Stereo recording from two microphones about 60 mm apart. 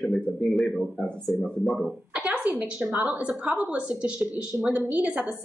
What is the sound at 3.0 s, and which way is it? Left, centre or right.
A woman's voice, centre.